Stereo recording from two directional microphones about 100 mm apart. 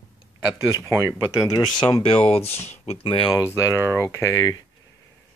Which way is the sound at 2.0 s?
70° left (ahead or behind).